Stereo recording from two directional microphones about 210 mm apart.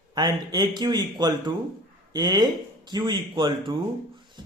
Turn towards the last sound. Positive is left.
turn(degrees=-25)  # may be behind; listen again after turning